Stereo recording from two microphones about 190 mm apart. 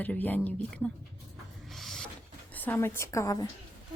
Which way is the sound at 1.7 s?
Centre (ahead or behind).